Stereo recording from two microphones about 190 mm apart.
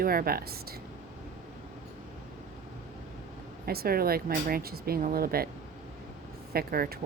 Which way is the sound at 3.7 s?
55° right (ahead or behind).